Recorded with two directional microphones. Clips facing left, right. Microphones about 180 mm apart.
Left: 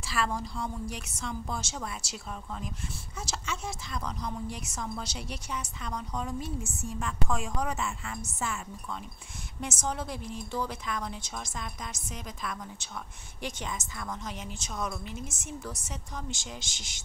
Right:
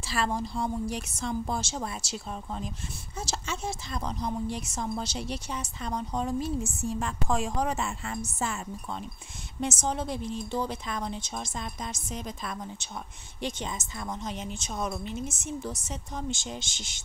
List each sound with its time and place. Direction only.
0.0 s a woman's voice: 30° right (ahead or behind)